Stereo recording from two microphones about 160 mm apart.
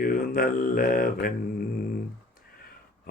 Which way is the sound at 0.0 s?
65° left (ahead or behind).